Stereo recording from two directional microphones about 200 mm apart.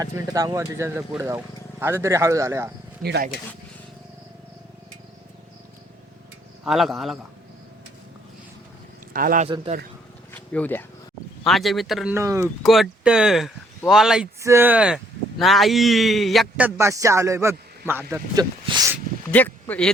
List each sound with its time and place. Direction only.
0.0 s speech: 15° right (ahead or behind)
3.0 s speech: 50° right (ahead or behind)
6.7 s speech: centre (ahead or behind)
9.1 s speech: 45° right (ahead or behind)
10.3 s a sound: 10° left (ahead or behind)
11.4 s speech: centre (ahead or behind)
12.1 s speech: 15° right (ahead or behind)
12.6 s speech: centre (ahead or behind)
18.1 s a sound: 20° right (ahead or behind)
19.3 s speech: 10° left (ahead or behind)